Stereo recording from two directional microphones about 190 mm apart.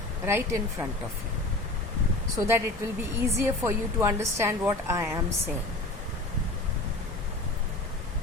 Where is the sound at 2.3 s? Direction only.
15° right (ahead or behind).